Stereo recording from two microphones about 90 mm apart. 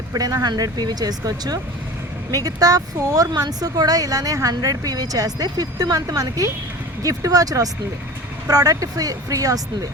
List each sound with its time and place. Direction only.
0.1 s speech: 40° right (ahead or behind)